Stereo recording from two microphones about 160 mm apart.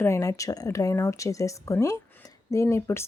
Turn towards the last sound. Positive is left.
turn(degrees=15)  # may be behind; listen again after turning